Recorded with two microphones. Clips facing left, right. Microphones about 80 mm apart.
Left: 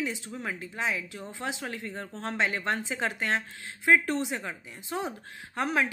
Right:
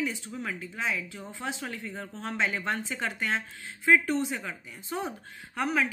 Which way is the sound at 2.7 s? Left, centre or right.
Centre.